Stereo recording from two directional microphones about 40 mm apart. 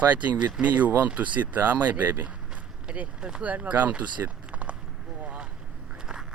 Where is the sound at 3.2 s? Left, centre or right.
Right.